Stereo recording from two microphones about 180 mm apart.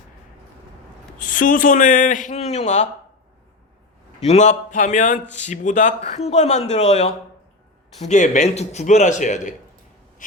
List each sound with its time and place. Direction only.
1.2 s speech: 50° left (ahead or behind)
4.3 s speech: 40° left (ahead or behind)